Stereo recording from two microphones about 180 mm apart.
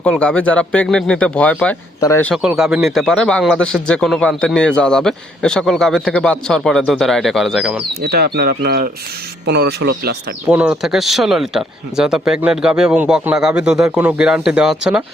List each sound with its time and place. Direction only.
0.0 s speech: 5° left (ahead or behind)
2.3 s speech: centre (ahead or behind)
8.0 s speech: 65° right (ahead or behind)
10.5 s speech: 5° right (ahead or behind)